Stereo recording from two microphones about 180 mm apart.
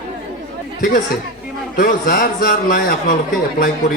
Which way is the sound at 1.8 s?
55° left (ahead or behind).